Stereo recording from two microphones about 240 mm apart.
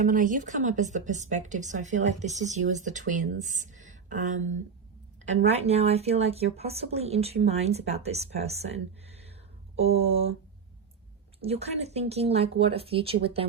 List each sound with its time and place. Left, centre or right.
0.0 s a woman's voice: right
11.4 s speech: right